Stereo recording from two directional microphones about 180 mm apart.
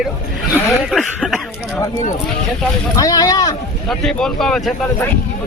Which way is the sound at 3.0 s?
20° left (ahead or behind).